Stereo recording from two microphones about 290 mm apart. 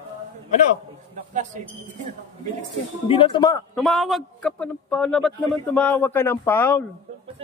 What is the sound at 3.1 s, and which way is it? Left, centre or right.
Speech, centre.